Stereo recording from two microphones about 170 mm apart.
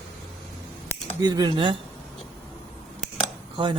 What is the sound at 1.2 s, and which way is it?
Speech, 25° right (ahead or behind).